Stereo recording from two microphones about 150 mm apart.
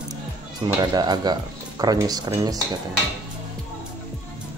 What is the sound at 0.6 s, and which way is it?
Speech, 30° right (ahead or behind).